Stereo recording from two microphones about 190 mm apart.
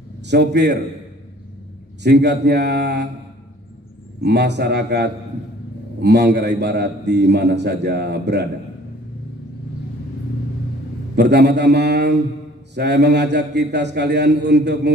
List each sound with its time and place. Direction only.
0.2 s a man's voice: 60° right (ahead or behind)
2.0 s a man's voice: 60° right (ahead or behind)
4.2 s a man's voice: 60° right (ahead or behind)
11.1 s a man's voice: 60° right (ahead or behind)